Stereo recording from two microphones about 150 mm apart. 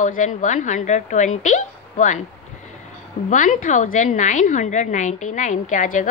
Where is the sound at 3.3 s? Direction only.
60° left (ahead or behind).